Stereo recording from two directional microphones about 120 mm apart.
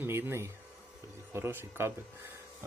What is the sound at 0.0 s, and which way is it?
Speech, 20° right (ahead or behind).